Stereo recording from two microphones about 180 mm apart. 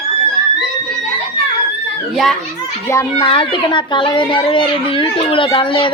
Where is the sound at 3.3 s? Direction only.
30° left (ahead or behind).